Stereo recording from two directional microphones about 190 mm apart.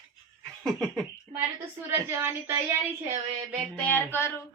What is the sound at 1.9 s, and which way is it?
Speech, 15° right (ahead or behind).